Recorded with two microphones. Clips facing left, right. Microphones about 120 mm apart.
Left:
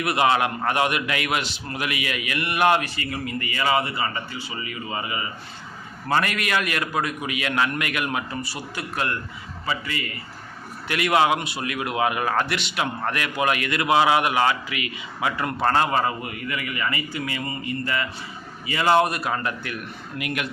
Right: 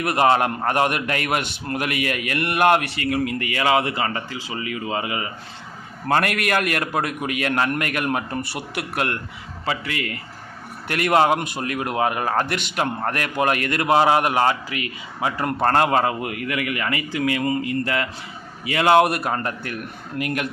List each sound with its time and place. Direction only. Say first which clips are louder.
0.0 s a man's voice: right 3 dB; 45° right (ahead or behind); by 5.3 s 80° right
6.1 s speech: right 3 dB; 55° right (ahead or behind)
9.6 s a man's voice: right 3 dB; 75° right (ahead or behind)
10.8 s speech: right 2 dB; 45° right (ahead or behind)
15.6 s a man's voice: right 3 dB; 55° right (ahead or behind); by 18.0 s 85° right
18.6 s a man's voice: right 3 dB; 70° right (ahead or behind)
19.3 s a man's voice: right 1 dB; 40° right (ahead or behind)